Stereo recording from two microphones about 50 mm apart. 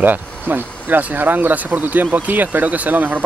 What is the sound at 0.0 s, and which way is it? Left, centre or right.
Speech, right.